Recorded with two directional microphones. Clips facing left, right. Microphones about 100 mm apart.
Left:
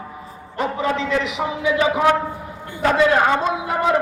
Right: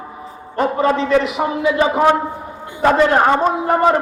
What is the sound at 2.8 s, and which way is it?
A man's voice, 35° right (ahead or behind).